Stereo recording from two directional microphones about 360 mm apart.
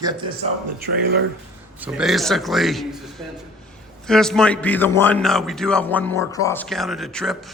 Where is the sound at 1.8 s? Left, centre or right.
Centre.